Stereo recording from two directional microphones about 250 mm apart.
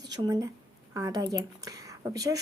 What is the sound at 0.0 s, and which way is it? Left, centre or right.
A woman's voice, centre.